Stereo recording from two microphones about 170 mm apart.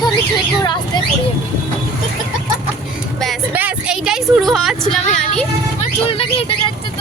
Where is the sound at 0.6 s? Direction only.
25° left (ahead or behind).